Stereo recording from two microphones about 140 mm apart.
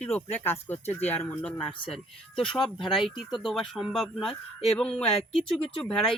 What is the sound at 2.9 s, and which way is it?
Speech, centre (ahead or behind).